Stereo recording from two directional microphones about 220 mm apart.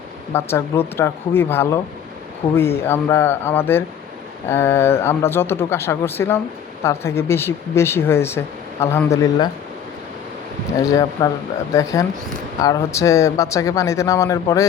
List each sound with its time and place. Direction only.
0.3 s speech: 10° left (ahead or behind)
10.8 s speech: 15° left (ahead or behind)